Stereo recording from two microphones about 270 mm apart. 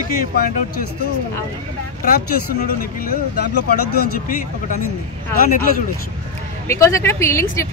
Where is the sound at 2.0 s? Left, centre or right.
Left.